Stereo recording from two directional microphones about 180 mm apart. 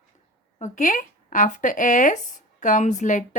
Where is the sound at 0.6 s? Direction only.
40° left (ahead or behind).